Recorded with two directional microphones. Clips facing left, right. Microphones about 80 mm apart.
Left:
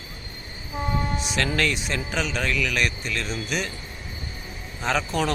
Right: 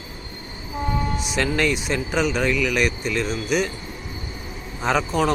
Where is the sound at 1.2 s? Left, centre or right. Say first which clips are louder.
Right 3 dB; centre.